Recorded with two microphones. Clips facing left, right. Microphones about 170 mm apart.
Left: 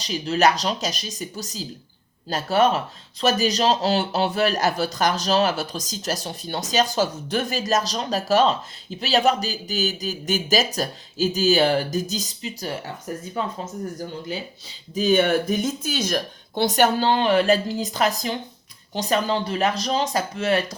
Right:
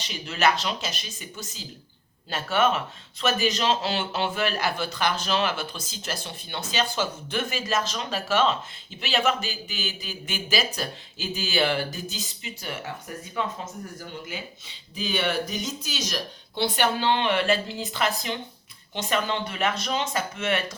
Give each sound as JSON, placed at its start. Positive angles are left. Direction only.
{"t": 0.0, "sound": "speech", "side_deg": 35}